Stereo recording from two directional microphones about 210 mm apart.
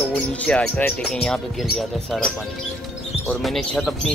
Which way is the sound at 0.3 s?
5° left (ahead or behind).